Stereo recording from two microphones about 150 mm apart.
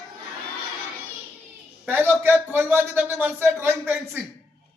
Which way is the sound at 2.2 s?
15° right (ahead or behind).